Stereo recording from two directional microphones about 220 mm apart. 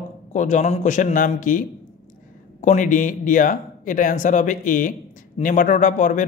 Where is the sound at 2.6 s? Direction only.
35° left (ahead or behind).